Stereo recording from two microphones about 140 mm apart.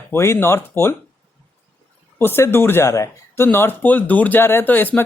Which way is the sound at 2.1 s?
15° left (ahead or behind).